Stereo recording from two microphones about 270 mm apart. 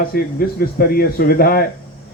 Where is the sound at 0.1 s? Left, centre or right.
Left.